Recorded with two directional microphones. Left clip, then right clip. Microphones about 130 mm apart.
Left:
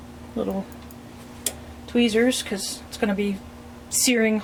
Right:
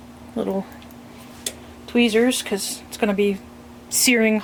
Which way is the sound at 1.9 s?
25° right (ahead or behind).